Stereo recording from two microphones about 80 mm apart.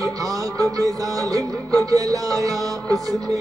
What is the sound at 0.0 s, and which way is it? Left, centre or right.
Music, right.